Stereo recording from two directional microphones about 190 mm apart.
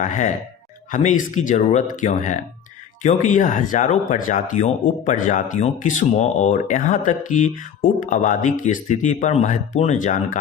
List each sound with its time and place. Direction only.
0.0 s speech: 40° left (ahead or behind)